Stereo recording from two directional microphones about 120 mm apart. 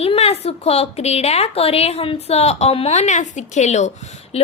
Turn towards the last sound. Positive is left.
turn(degrees=60)  # may be behind; listen again after turning